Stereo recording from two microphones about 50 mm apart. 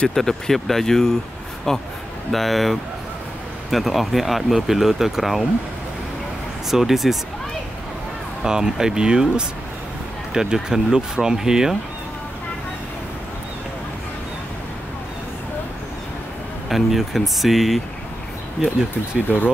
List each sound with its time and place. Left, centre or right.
0.1 s speech: centre
6.7 s speech: centre
8.5 s speech: centre
10.3 s speech: centre
16.6 s speech: centre
19.2 s speech: left